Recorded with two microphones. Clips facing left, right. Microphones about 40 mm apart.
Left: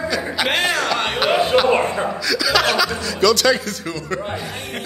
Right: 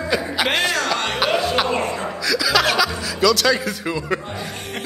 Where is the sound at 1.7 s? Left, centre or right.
Left.